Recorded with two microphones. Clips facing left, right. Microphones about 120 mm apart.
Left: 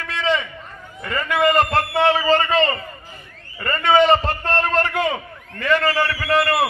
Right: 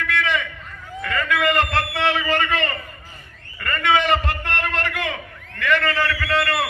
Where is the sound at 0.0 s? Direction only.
25° left (ahead or behind).